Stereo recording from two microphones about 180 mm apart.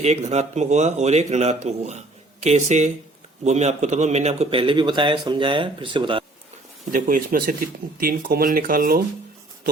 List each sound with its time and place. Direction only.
0.0 s a man's voice: 40° right (ahead or behind)
6.9 s speech: 50° right (ahead or behind)